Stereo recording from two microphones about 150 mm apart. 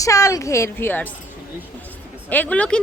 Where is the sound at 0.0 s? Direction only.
20° left (ahead or behind).